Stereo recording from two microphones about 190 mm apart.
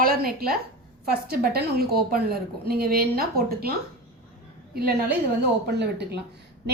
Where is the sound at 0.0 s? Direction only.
50° right (ahead or behind).